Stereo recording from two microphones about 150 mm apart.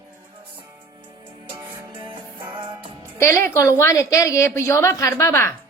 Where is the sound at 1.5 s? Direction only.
35° right (ahead or behind).